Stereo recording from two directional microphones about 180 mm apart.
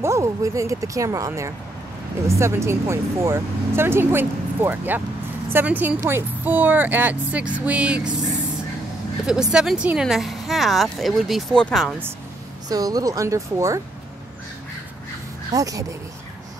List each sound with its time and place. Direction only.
0.0 s speech: 15° right (ahead or behind)
9.2 s speech: 5° right (ahead or behind)
12.6 s speech: 20° right (ahead or behind)
15.5 s speech: 20° right (ahead or behind)